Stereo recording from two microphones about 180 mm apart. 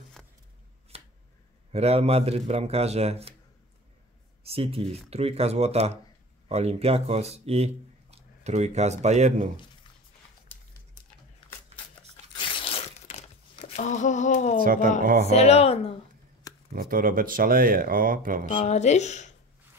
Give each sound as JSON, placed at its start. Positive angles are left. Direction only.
{"t": 0.9, "sound": "finger snapping", "side_deg": -35}
{"t": 1.7, "sound": "a man's voice", "side_deg": -35}
{"t": 4.4, "sound": "a man's voice", "side_deg": -35}
{"t": 12.4, "sound": "a sound", "side_deg": 30}
{"t": 14.6, "sound": "speech", "side_deg": -50}
{"t": 15.2, "sound": "speech", "side_deg": 35}
{"t": 16.7, "sound": "speech", "side_deg": -55}
{"t": 18.4, "sound": "speech", "side_deg": 40}